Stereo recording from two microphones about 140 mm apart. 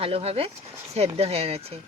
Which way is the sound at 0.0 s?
45° right (ahead or behind).